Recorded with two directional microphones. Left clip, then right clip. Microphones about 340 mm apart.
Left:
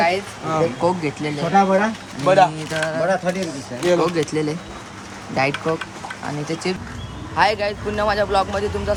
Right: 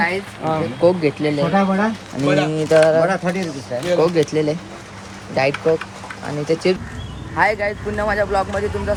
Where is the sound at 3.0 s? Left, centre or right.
Centre.